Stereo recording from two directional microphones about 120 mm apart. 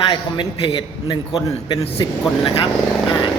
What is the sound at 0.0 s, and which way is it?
A man's voice, 45° left (ahead or behind).